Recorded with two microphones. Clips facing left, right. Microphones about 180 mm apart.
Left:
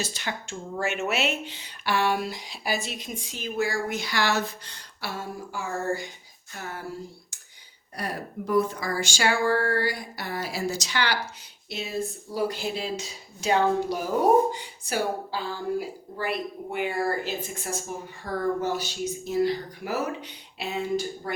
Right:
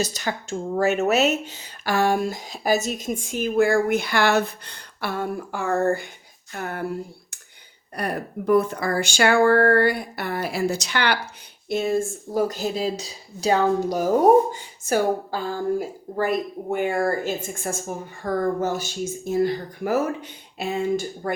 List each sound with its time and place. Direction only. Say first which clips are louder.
0.0 s speech: right 6 dB; 40° right (ahead or behind); by 6.8 s 60° right (ahead or behind)
7.9 s speech: right 5 dB; 60° right (ahead or behind)